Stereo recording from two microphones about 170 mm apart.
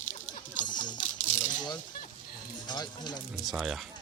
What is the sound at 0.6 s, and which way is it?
Music, 25° left (ahead or behind).